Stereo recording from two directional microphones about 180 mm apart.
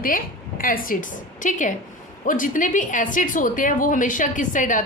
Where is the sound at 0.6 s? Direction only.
50° left (ahead or behind).